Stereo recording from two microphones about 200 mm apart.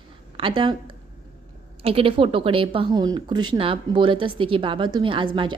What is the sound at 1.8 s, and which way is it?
A woman's voice, 30° right (ahead or behind).